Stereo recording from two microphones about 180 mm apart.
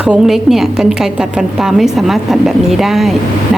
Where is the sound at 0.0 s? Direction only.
5° right (ahead or behind).